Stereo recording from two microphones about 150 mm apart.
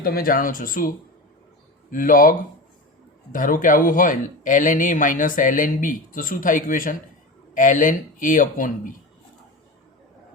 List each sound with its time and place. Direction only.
0.0 s speech: 75° left (ahead or behind)
3.3 s speech: 65° left (ahead or behind)